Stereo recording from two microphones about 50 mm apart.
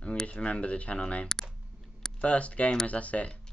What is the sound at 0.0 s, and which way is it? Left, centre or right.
Speech, left.